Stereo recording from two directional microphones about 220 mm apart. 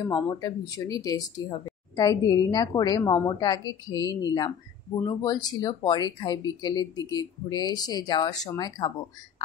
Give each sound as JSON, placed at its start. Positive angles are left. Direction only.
{"t": 0.1, "sound": "speech", "side_deg": 15}